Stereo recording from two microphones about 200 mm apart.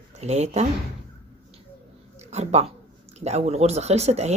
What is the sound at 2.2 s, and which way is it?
Speech, 35° right (ahead or behind).